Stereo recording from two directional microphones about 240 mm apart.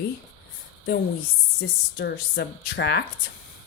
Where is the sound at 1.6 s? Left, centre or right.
Left.